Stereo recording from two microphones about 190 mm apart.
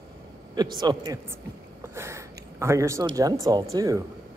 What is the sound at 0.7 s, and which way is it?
A woman's voice, 20° right (ahead or behind).